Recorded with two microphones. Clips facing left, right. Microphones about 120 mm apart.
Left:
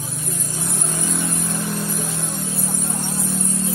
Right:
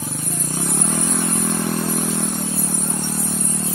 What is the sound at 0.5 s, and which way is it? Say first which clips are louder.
Vehicle: right 6 dB; 60° right (ahead or behind).